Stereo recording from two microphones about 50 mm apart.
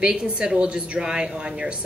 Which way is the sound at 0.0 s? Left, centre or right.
Centre.